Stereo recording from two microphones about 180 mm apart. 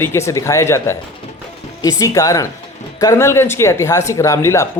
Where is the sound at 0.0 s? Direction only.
15° left (ahead or behind).